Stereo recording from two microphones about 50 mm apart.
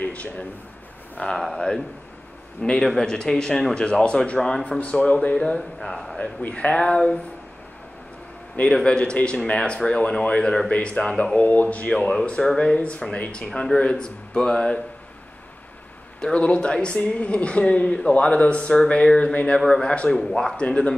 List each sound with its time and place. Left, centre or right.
0.0 s a man's voice: left
1.2 s speech: centre
4.7 s speech: left
5.3 s speech: centre
6.5 s speech: left
8.8 s speech: left
11.3 s speech: left
11.9 s speech: centre
16.2 s speech: centre
19.0 s speech: centre
20.2 s speech: centre
20.6 s speech: left